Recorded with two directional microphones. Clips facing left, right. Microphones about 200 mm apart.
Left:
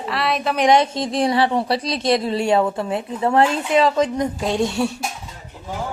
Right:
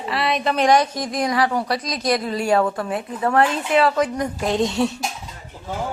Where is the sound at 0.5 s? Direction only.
20° left (ahead or behind).